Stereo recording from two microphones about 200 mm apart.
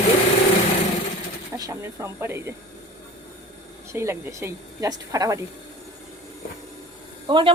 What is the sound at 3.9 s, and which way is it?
Speech, 15° right (ahead or behind).